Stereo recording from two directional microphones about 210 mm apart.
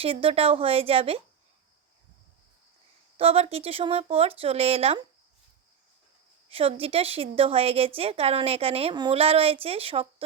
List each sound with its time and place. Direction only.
0.0 s a woman's voice: 25° right (ahead or behind)
3.2 s a woman's voice: 30° right (ahead or behind)
6.5 s a woman's voice: 25° right (ahead or behind)